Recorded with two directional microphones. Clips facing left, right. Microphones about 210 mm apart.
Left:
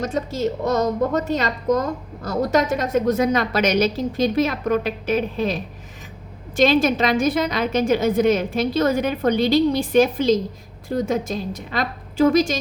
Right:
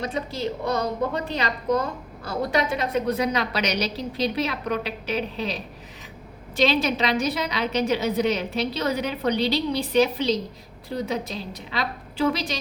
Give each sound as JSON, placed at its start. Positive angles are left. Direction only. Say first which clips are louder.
{"t": 0.0, "sound": "a woman's voice", "louder": "left 5 dB", "side_deg": 45}